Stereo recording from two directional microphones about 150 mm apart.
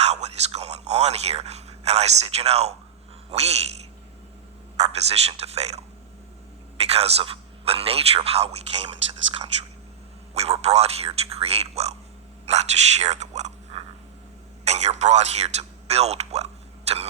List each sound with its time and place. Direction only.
0.0 s dog: 45° right (ahead or behind)
3.2 s a man's voice: 45° right (ahead or behind)
4.8 s a man's voice: 45° right (ahead or behind)
10.3 s a man's voice: 45° right (ahead or behind)
16.9 s cough: 45° right (ahead or behind)